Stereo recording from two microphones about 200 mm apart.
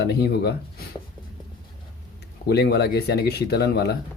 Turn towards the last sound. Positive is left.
turn(degrees=55)  # may be behind; listen again after turning